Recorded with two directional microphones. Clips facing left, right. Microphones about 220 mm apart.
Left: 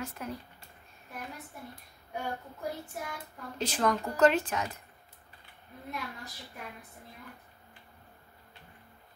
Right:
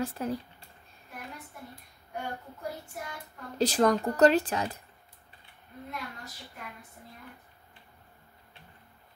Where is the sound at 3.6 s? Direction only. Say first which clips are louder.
Right 5 dB; 35° right (ahead or behind).